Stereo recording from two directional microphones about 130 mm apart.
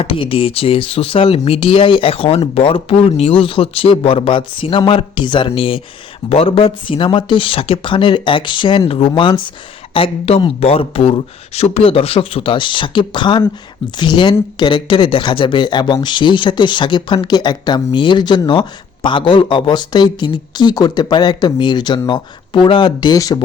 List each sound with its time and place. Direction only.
0.0 s speech: 45° left (ahead or behind)
23.1 s speech: 25° left (ahead or behind)